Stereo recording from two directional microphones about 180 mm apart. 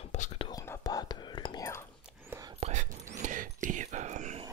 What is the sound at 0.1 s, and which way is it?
Whispering, 40° left (ahead or behind).